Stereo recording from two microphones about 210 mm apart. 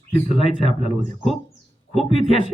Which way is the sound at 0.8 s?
35° right (ahead or behind).